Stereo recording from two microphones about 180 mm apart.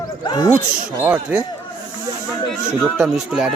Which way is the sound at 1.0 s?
10° right (ahead or behind).